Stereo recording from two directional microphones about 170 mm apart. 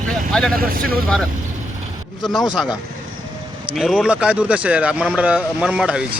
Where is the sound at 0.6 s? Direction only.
60° right (ahead or behind).